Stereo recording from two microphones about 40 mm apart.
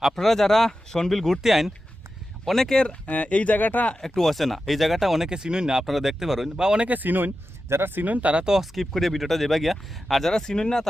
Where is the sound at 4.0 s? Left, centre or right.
Centre.